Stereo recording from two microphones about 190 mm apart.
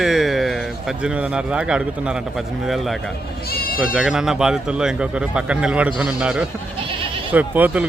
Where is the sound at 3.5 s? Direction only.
50° left (ahead or behind).